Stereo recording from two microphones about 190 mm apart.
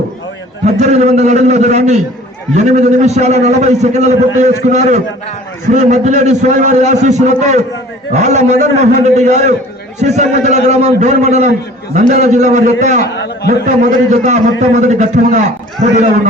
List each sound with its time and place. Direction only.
0.6 s a man's voice: 35° right (ahead or behind)
13.1 s a man's voice: 60° left (ahead or behind)
14.3 s a man's voice: 35° right (ahead or behind)